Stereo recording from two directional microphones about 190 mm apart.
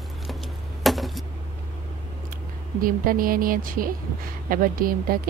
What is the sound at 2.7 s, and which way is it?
A woman's voice, 50° right (ahead or behind).